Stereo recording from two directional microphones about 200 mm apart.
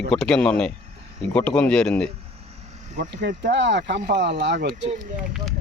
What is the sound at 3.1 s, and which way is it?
Speech, 60° right (ahead or behind).